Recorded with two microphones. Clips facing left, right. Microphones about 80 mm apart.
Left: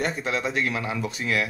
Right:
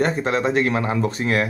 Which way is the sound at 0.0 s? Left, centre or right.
Right.